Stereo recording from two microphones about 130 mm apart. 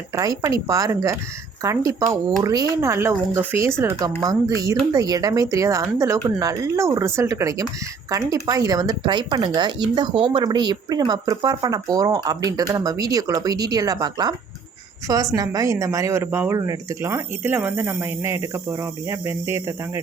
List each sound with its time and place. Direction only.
0.1 s speech: 25° right (ahead or behind)